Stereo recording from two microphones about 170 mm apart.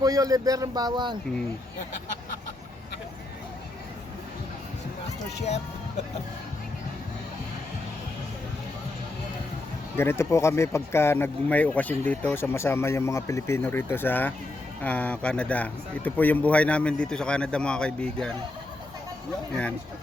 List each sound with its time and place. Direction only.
0.0 s speech: 20° right (ahead or behind)
10.0 s speech: 15° left (ahead or behind)